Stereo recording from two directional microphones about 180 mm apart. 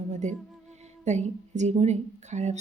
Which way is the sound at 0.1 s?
40° right (ahead or behind).